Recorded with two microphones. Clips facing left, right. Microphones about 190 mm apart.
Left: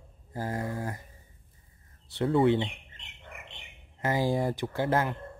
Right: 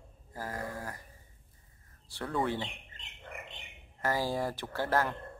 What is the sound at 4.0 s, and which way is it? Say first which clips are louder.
Speech: left 4 dB; 15° left (ahead or behind).